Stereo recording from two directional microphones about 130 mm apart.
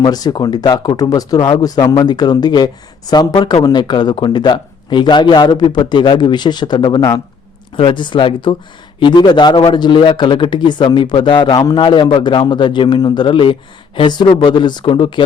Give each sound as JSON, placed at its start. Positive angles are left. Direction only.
{"t": 0.0, "sound": "speech", "side_deg": 30}